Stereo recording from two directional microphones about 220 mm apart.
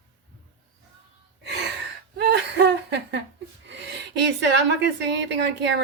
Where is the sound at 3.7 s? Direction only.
55° right (ahead or behind).